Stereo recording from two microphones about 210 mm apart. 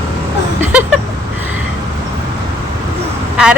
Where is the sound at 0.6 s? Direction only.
10° right (ahead or behind).